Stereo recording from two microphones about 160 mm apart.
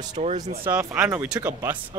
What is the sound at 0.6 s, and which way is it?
Speech, 10° right (ahead or behind).